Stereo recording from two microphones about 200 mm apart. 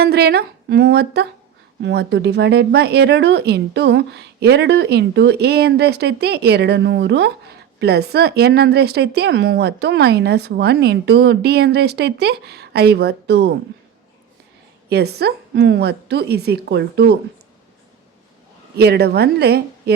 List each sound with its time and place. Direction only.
0.0 s speech: 50° right (ahead or behind)
14.8 s speech: 55° right (ahead or behind)
18.8 s a woman's voice: 55° right (ahead or behind)